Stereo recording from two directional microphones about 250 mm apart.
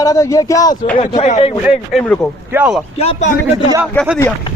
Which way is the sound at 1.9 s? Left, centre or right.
Centre.